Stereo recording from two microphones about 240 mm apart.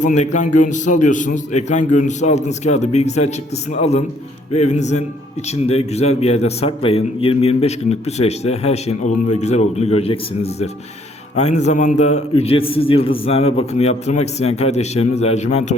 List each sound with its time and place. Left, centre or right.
0.0 s a man's voice: left